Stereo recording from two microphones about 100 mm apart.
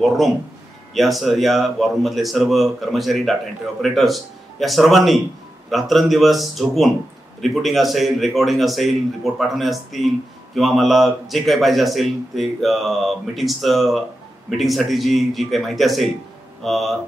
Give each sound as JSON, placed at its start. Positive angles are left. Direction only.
{"t": 0.9, "sound": "a man's voice", "side_deg": 0}